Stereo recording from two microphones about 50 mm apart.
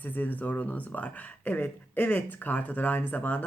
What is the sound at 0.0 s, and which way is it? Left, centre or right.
Speech, left.